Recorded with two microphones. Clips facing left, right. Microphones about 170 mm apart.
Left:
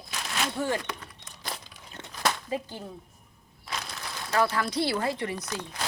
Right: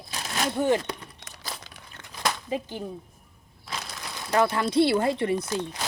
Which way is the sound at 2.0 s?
20° left (ahead or behind).